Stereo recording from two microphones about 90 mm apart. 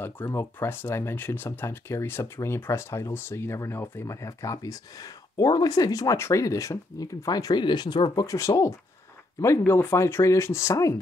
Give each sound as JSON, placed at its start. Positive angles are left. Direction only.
{"t": 0.0, "sound": "speech", "side_deg": 25}
{"t": 8.3, "sound": "speech", "side_deg": 35}